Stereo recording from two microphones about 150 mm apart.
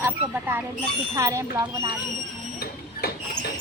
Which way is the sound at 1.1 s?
20° right (ahead or behind).